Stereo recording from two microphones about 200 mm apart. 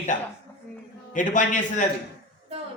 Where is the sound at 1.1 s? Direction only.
40° left (ahead or behind).